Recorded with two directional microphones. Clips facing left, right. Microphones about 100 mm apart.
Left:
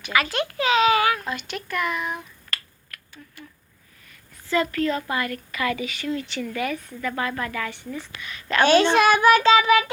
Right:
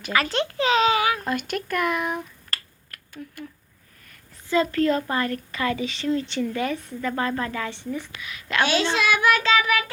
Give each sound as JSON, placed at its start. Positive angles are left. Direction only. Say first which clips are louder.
{"t": 0.0, "sound": "a child's voice", "louder": "even", "side_deg": -35}
{"t": 0.9, "sound": "a sound", "louder": "left 2 dB", "side_deg": -20}
{"t": 1.2, "sound": "speech", "louder": "right 4 dB", "side_deg": -50}
{"t": 4.4, "sound": "a woman's voice", "louder": "right 1 dB", "side_deg": -20}
{"t": 4.7, "sound": "a child's voice", "louder": "right 2 dB", "side_deg": -40}
{"t": 8.2, "sound": "a woman's voice", "louder": "left 4 dB", "side_deg": -5}
{"t": 8.6, "sound": "child singing", "louder": "left 7 dB", "side_deg": 50}